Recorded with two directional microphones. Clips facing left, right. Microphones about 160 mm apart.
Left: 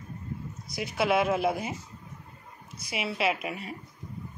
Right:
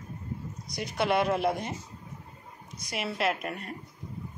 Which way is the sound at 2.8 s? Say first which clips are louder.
Left 1 dB; centre (ahead or behind).